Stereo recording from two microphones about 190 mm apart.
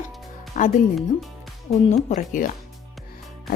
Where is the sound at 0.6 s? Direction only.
40° left (ahead or behind).